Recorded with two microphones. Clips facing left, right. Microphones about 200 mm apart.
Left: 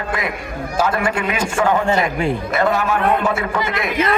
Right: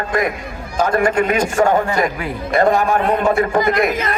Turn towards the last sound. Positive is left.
turn(degrees=-45)  # may be behind; listen again after turning